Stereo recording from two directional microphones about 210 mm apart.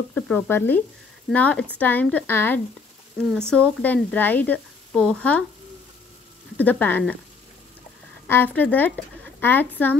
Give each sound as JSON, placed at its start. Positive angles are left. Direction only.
{"t": 0.1, "sound": "speech", "side_deg": 10}
{"t": 6.5, "sound": "speech", "side_deg": 5}
{"t": 8.3, "sound": "speech", "side_deg": 10}